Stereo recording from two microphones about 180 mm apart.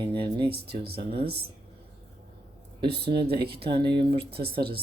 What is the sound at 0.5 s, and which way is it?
Speech, 60° right (ahead or behind).